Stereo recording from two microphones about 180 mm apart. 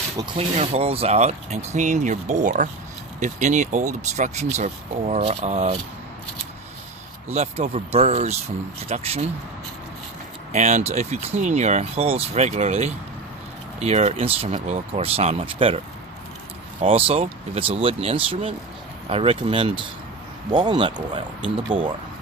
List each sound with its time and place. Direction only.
0.3 s speech: 35° right (ahead or behind)
7.3 s speech: 35° right (ahead or behind)
10.5 s speech: 40° right (ahead or behind)
16.8 s speech: 30° right (ahead or behind)